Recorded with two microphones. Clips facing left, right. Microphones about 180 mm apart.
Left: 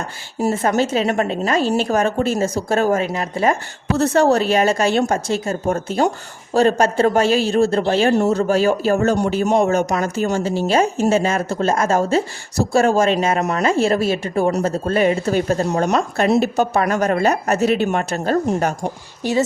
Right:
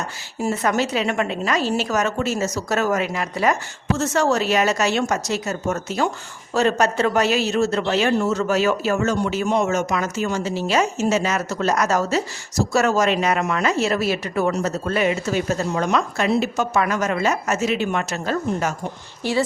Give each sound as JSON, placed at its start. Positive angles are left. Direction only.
{"t": 0.4, "sound": "speech", "side_deg": 35}
{"t": 10.7, "sound": "speech", "side_deg": 30}
{"t": 17.6, "sound": "a woman's voice", "side_deg": 50}
{"t": 19.2, "sound": "a woman's voice", "side_deg": 20}